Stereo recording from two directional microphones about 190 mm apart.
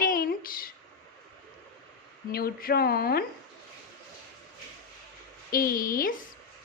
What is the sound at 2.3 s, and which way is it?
Speech, 55° left (ahead or behind).